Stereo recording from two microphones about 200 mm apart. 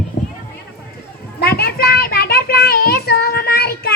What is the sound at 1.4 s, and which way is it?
Child singing, 50° left (ahead or behind).